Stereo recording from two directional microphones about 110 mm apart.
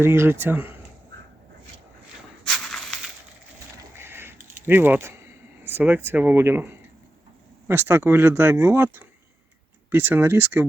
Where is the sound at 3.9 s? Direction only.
20° right (ahead or behind).